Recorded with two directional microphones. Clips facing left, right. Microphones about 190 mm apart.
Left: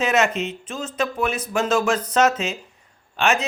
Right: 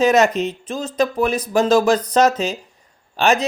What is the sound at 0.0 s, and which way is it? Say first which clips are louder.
Speech: right 6 dB; 35° right (ahead or behind).